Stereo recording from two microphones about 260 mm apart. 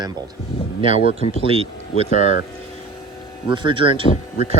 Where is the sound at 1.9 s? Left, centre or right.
Left.